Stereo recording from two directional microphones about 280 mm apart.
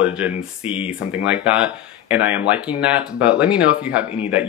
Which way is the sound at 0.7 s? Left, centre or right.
Centre.